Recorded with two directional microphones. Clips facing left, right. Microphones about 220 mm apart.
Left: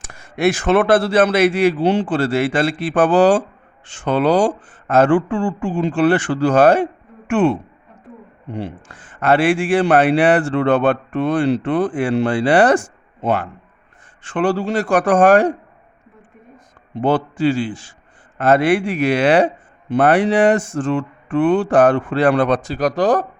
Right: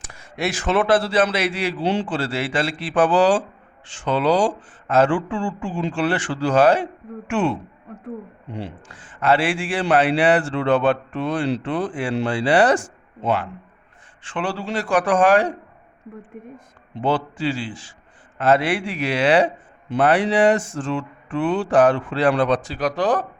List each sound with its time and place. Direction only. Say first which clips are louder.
0.1 s a man's voice: left 8 dB; 50° left (ahead or behind)
8.5 s a man's voice: left 5 dB; 50° left (ahead or behind)
16.9 s a man's voice: left 4 dB; 50° left (ahead or behind)